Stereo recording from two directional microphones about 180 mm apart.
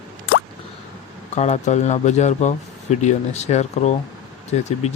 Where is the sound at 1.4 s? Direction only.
40° left (ahead or behind).